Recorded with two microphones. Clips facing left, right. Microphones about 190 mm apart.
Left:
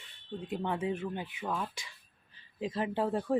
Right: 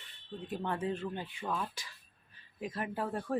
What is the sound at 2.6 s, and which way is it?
Speech, 25° left (ahead or behind).